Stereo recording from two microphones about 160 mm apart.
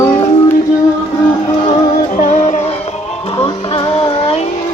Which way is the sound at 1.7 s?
45° left (ahead or behind).